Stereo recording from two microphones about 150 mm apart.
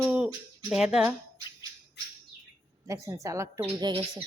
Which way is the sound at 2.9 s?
20° right (ahead or behind).